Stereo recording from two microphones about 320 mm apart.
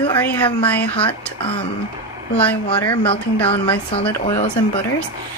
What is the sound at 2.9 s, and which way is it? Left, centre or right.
Speech, centre.